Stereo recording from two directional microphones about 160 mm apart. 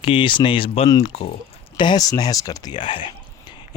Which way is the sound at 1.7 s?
25° left (ahead or behind).